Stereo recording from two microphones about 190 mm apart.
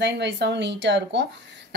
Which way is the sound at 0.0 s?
65° right (ahead or behind).